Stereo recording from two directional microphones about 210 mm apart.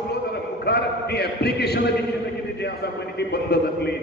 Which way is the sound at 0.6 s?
50° left (ahead or behind).